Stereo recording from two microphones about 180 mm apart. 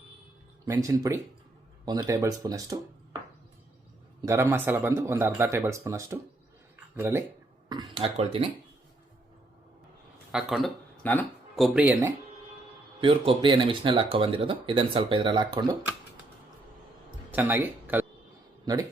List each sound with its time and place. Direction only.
0.6 s speech: 20° right (ahead or behind)
4.3 s a man's voice: 10° right (ahead or behind)
7.9 s speech: 30° right (ahead or behind)
10.3 s speech: centre (ahead or behind)
11.0 s a sound: 10° left (ahead or behind)
11.6 s a man's voice: 5° right (ahead or behind)
13.0 s speech: 30° right (ahead or behind)
17.3 s speech: 10° right (ahead or behind)
18.6 s speech: 20° right (ahead or behind)